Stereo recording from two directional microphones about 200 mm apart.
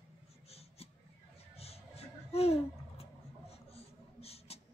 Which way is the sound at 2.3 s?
30° left (ahead or behind).